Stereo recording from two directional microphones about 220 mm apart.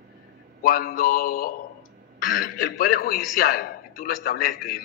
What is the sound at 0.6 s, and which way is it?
A man's voice, 40° left (ahead or behind).